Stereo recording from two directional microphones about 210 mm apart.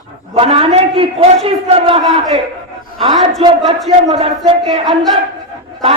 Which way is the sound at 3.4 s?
25° right (ahead or behind).